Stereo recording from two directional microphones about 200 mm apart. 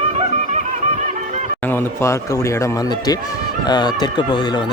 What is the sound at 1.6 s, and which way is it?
Speech, 10° left (ahead or behind).